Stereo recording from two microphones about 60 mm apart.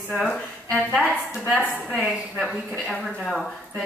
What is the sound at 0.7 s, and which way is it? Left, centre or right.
A woman's voice, left.